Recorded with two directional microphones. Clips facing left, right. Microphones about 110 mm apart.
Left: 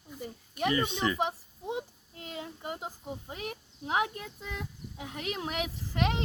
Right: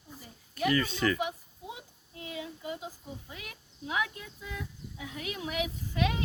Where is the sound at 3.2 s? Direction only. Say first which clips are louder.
Left 7 dB; 40° left (ahead or behind).